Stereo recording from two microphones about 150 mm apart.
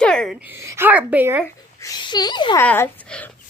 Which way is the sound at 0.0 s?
5° left (ahead or behind).